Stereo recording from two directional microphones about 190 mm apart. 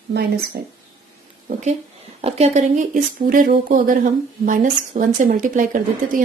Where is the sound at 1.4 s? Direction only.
40° right (ahead or behind).